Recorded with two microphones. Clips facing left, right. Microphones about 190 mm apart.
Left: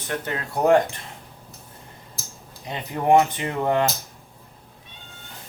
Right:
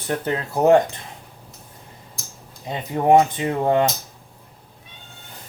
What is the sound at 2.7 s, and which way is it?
Speech, 20° right (ahead or behind).